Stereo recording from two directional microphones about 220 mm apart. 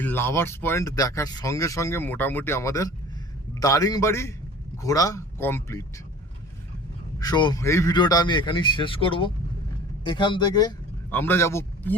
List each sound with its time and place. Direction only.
0.0 s speech: 10° left (ahead or behind)
7.2 s a man's voice: 20° left (ahead or behind)